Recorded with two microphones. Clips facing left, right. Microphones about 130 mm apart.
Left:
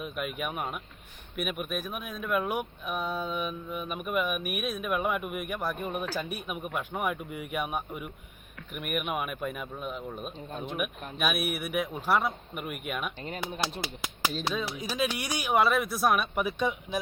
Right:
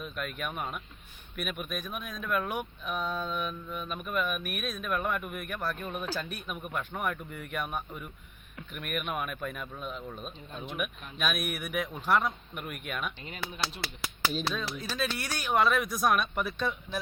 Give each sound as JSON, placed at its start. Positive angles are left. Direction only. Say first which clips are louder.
{"t": 0.0, "sound": "speech", "louder": "left 3 dB", "side_deg": 10}
{"t": 13.8, "sound": "speech", "louder": "left 1 dB", "side_deg": 20}